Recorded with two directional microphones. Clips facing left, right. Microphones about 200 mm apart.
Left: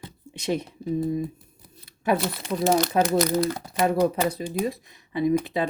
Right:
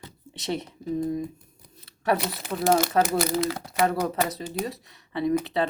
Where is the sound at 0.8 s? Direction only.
30° left (ahead or behind).